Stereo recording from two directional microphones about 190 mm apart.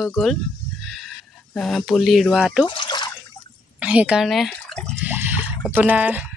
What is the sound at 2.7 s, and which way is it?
Drip, 25° left (ahead or behind).